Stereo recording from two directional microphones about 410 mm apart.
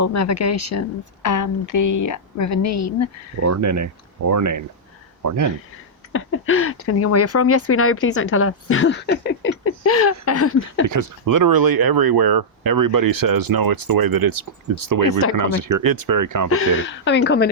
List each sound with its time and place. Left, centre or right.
0.0 s speech: left
3.4 s speech: right
6.1 s speech: left
10.8 s speech: right
16.5 s speech: left